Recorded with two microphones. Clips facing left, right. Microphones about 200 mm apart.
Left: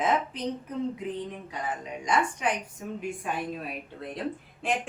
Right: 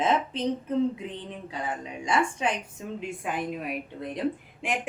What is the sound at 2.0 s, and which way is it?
A woman's voice, 25° right (ahead or behind).